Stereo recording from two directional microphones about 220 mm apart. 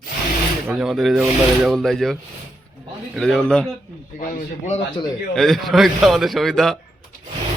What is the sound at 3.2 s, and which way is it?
Speech, centre (ahead or behind).